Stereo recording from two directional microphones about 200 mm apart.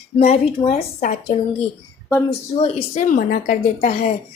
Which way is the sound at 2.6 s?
30° left (ahead or behind).